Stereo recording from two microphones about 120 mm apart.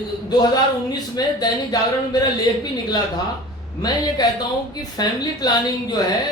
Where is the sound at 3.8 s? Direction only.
35° left (ahead or behind).